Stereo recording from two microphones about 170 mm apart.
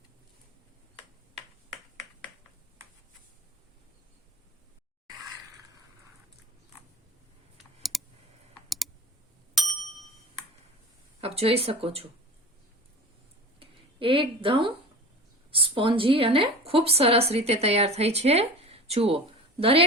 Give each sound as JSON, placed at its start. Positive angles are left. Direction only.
{"t": 7.6, "sound": "computer keyboard", "side_deg": 0}
{"t": 9.6, "sound": "ding", "side_deg": 0}
{"t": 11.2, "sound": "speech", "side_deg": -35}
{"t": 13.6, "sound": "a sound", "side_deg": -30}
{"t": 15.5, "sound": "a woman's voice", "side_deg": -30}